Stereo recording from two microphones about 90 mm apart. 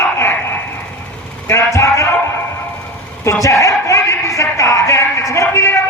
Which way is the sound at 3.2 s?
35° left (ahead or behind).